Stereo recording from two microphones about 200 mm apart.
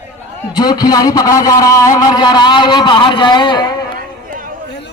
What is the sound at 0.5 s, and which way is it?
A man's voice, 20° left (ahead or behind).